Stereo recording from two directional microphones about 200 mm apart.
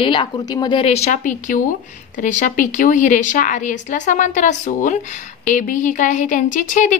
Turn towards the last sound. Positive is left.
turn(degrees=40)  # may be behind; listen again after turning